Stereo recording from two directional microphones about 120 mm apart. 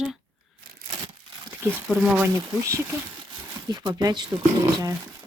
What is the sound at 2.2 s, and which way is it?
Speech, 25° right (ahead or behind).